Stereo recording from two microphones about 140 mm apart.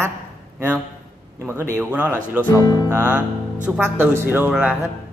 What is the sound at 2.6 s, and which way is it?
Music, 25° left (ahead or behind).